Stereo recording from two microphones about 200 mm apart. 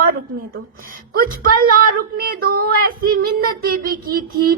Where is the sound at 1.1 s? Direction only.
45° right (ahead or behind).